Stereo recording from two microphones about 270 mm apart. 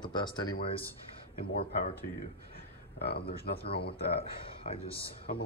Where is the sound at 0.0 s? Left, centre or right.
Centre.